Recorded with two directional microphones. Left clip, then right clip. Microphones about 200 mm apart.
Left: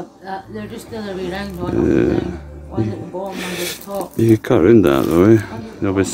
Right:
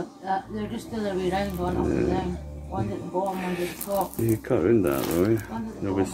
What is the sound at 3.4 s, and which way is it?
Speech, 55° left (ahead or behind).